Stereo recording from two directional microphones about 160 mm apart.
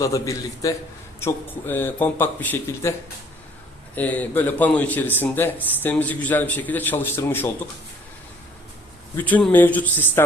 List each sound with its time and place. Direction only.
0.0 s a man's voice: 20° left (ahead or behind)
3.9 s a man's voice: 10° left (ahead or behind)
9.1 s a man's voice: 10° left (ahead or behind)